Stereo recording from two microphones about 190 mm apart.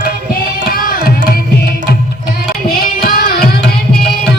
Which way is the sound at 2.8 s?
50° left (ahead or behind).